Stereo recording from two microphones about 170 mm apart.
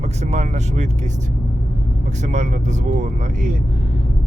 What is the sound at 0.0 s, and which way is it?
Speech, 40° right (ahead or behind).